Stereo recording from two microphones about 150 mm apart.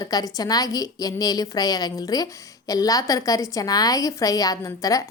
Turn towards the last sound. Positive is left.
turn(degrees=20)  # may be behind; listen again after turning